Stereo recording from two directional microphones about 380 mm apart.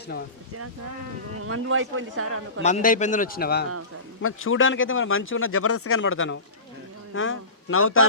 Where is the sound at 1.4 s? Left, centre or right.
Right.